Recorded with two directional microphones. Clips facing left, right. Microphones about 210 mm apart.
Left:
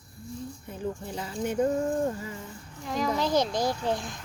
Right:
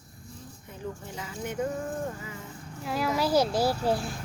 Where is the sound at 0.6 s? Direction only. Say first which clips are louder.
Left 3 dB; 35° left (ahead or behind).